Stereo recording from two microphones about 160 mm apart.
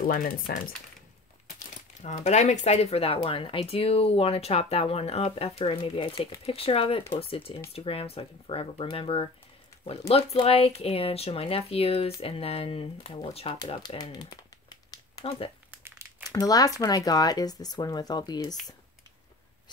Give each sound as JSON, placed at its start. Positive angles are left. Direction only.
{"t": 0.0, "sound": "speech", "side_deg": 60}
{"t": 2.0, "sound": "speech", "side_deg": 45}
{"t": 13.9, "sound": "crumpling", "side_deg": 25}
{"t": 15.2, "sound": "speech", "side_deg": 35}
{"t": 15.8, "sound": "crumpling", "side_deg": -15}
{"t": 16.3, "sound": "speech", "side_deg": 25}